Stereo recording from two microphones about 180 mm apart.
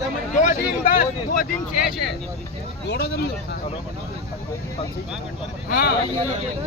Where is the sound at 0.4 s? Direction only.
50° left (ahead or behind).